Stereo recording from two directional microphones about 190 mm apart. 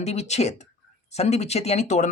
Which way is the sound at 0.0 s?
35° left (ahead or behind).